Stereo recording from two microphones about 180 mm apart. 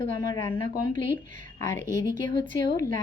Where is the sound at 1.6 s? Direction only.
20° left (ahead or behind).